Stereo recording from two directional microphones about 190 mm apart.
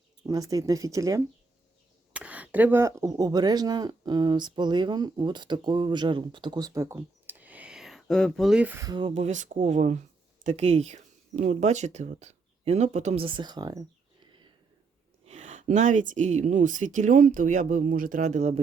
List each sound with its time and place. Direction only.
0.3 s speech: 20° right (ahead or behind)
2.1 s speech: 5° right (ahead or behind)
8.9 s speech: 25° right (ahead or behind)
15.3 s speech: 35° right (ahead or behind)